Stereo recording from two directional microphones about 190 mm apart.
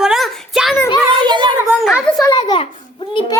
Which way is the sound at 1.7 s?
5° right (ahead or behind).